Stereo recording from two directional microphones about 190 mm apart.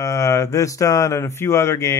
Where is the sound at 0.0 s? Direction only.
15° left (ahead or behind).